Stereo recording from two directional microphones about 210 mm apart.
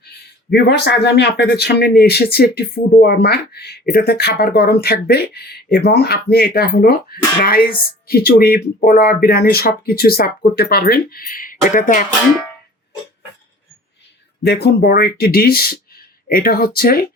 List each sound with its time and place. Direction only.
0.5 s speech: 55° left (ahead or behind)
14.4 s speech: 50° left (ahead or behind)